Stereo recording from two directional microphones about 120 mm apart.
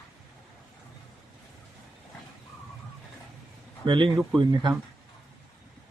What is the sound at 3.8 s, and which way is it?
Speech, 40° right (ahead or behind).